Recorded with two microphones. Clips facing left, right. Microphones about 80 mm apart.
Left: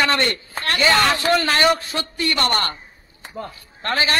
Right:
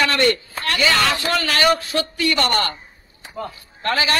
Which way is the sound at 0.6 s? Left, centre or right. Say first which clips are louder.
Left 1 dB; left.